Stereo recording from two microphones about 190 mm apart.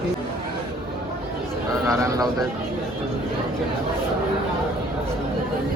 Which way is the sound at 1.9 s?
15° right (ahead or behind).